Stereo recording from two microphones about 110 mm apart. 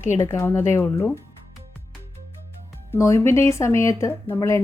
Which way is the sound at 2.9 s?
25° left (ahead or behind).